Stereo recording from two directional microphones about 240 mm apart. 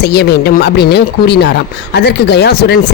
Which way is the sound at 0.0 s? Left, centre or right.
Left.